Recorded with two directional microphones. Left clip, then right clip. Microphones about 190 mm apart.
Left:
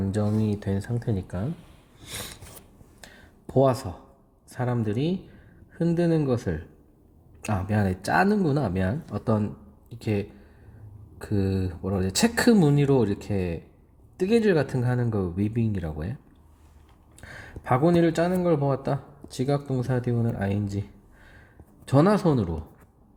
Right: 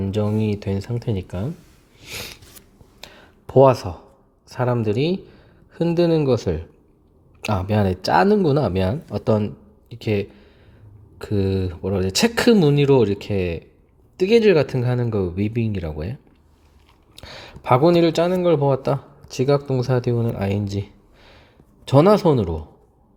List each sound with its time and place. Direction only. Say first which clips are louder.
0.1 s speech: right 6 dB; 25° right (ahead or behind)
2.0 s sniff: right 5 dB; 15° right (ahead or behind)
3.5 s speech: right 8 dB; 25° right (ahead or behind)
17.2 s speech: right 5 dB; 25° right (ahead or behind)